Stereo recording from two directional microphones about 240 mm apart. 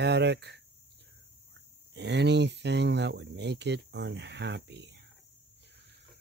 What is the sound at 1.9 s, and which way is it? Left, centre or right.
Speech, right.